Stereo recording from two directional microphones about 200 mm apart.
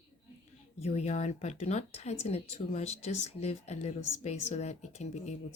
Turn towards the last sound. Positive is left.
turn(degrees=35)  # may be behind; listen again after turning